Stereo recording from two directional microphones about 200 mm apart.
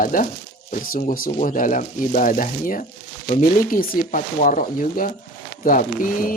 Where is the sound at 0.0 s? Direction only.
45° left (ahead or behind).